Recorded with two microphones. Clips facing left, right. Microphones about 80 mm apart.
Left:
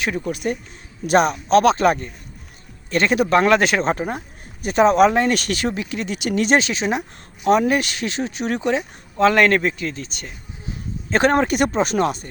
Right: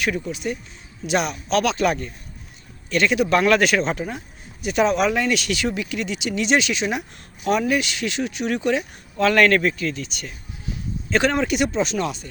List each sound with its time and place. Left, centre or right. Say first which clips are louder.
0.3 s speech: left 4 dB; left